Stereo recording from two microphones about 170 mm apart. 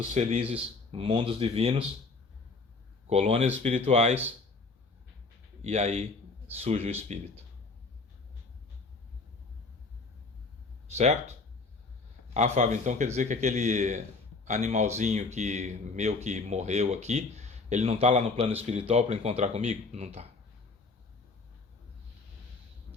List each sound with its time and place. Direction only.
0.1 s speech: 40° right (ahead or behind)
3.1 s speech: 35° right (ahead or behind)
5.6 s speech: 40° right (ahead or behind)
10.9 s a man's voice: 40° right (ahead or behind)